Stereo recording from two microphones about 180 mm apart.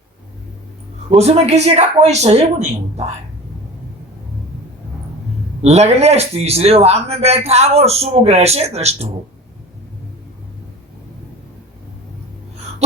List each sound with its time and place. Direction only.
1.1 s speech: 35° right (ahead or behind)
5.6 s speech: 35° right (ahead or behind)